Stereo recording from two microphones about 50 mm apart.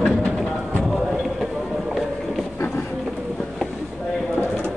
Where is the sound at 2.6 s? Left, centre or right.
Left.